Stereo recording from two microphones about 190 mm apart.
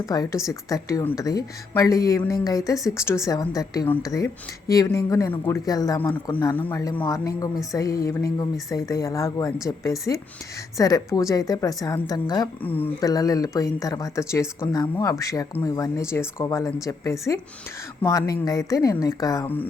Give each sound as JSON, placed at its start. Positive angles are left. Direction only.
{"t": 0.0, "sound": "a woman's voice", "side_deg": 20}
{"t": 12.6, "sound": "a woman's voice", "side_deg": 10}